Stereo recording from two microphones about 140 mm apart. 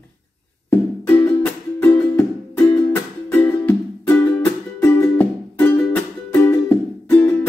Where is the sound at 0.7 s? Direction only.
15° left (ahead or behind).